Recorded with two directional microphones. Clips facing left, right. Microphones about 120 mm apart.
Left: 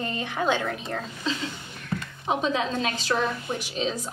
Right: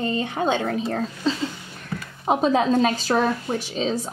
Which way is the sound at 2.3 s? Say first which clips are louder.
Right 7 dB; 40° right (ahead or behind).